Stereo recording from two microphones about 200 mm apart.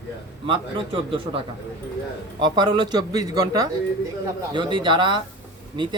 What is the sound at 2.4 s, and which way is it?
Speech, 20° right (ahead or behind).